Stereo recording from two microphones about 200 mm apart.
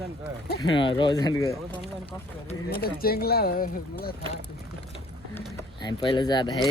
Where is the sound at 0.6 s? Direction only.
25° left (ahead or behind).